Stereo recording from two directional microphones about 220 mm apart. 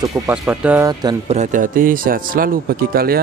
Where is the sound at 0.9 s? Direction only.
20° right (ahead or behind).